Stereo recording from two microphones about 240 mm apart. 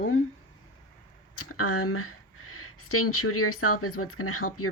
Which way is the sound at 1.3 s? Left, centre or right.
Left.